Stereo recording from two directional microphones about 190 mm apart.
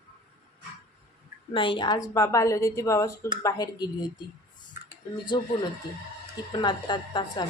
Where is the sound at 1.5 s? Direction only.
25° left (ahead or behind).